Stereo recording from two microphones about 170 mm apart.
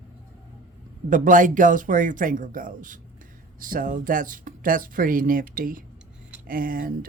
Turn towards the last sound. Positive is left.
turn(degrees=-55)  # may be behind; listen again after turning